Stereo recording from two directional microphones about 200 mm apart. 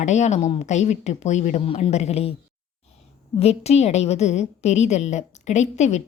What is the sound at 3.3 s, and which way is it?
Speech, 30° left (ahead or behind).